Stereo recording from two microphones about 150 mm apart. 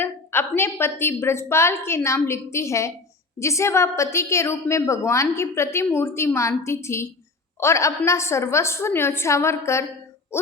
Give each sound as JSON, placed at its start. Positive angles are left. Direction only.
{"t": 0.0, "sound": "a woman's voice", "side_deg": 15}